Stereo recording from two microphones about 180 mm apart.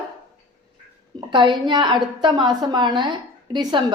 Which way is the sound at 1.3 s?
25° right (ahead or behind).